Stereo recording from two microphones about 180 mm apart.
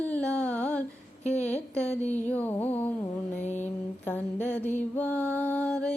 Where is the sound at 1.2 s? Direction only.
40° left (ahead or behind).